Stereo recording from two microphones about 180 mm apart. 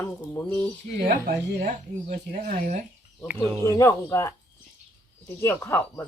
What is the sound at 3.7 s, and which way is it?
Speech, 15° left (ahead or behind).